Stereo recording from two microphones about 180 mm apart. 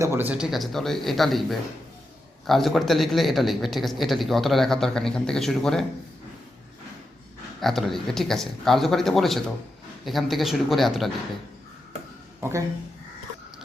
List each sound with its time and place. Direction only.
0.0 s speech: 10° right (ahead or behind)
7.6 s speech: centre (ahead or behind)
12.4 s speech: 15° right (ahead or behind)